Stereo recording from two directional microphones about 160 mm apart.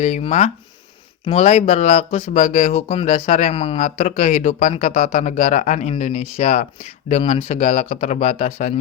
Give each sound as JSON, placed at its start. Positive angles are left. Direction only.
{"t": 0.0, "sound": "speech", "side_deg": 45}
{"t": 3.8, "sound": "speech", "side_deg": 45}